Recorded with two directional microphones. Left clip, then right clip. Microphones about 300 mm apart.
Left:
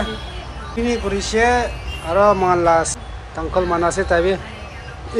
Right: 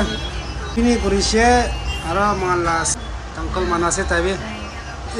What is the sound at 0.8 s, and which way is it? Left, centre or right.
A man's voice, centre.